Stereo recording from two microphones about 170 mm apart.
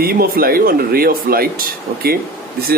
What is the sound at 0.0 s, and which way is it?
Speech, 60° right (ahead or behind).